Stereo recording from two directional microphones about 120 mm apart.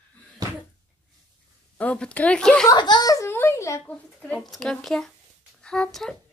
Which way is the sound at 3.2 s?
20° left (ahead or behind).